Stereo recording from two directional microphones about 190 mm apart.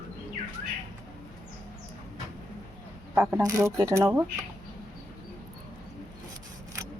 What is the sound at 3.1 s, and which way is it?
A woman's voice, 10° right (ahead or behind).